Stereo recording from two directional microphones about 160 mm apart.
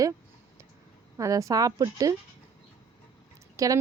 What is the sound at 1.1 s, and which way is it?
A woman's voice, 20° right (ahead or behind).